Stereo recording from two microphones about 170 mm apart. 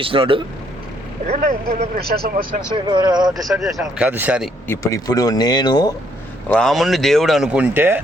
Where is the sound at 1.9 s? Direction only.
65° right (ahead or behind).